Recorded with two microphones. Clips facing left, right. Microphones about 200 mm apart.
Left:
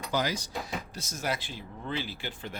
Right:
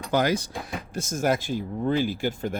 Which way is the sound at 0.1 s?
55° right (ahead or behind).